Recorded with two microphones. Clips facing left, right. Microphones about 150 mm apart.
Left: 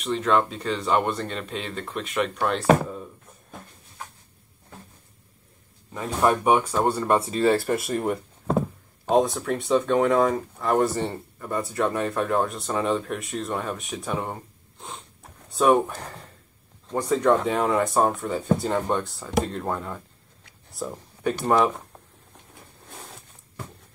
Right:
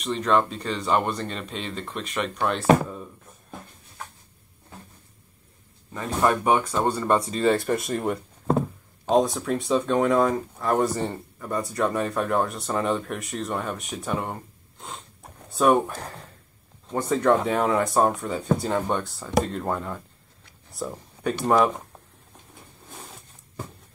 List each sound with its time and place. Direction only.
0.0 s speech: centre (ahead or behind)
5.9 s speech: 10° left (ahead or behind)